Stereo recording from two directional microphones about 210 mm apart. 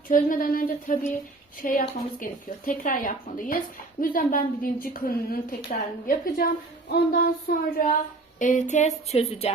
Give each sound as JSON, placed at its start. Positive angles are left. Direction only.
{"t": 0.1, "sound": "a woman's voice", "side_deg": 40}
{"t": 8.4, "sound": "a woman's voice", "side_deg": 35}